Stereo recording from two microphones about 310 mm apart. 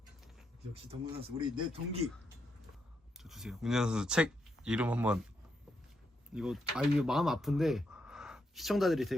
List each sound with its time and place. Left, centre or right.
0.7 s speech: centre
3.2 s speech: centre
6.3 s speech: centre